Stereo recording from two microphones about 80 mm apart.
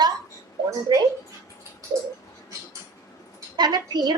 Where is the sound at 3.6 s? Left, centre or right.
Right.